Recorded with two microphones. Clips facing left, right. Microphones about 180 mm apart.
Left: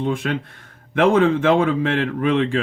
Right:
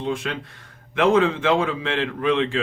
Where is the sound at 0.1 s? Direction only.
55° left (ahead or behind).